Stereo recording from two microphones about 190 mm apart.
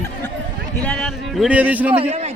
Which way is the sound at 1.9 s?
35° right (ahead or behind).